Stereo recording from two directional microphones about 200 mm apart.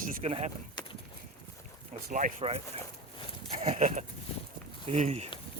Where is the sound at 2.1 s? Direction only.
40° right (ahead or behind).